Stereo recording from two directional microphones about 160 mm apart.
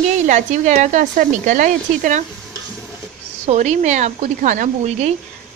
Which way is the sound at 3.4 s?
45° right (ahead or behind).